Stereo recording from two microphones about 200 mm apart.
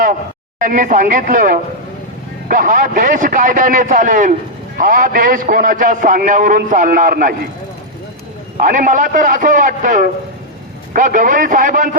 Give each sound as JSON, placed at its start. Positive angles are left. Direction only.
{"t": 0.6, "sound": "a man's voice", "side_deg": -40}
{"t": 8.6, "sound": "a man's voice", "side_deg": -40}